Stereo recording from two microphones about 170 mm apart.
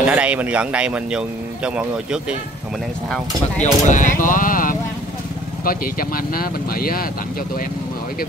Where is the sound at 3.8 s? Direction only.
50° left (ahead or behind).